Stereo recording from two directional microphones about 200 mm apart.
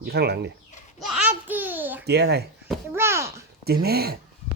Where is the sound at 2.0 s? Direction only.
55° right (ahead or behind).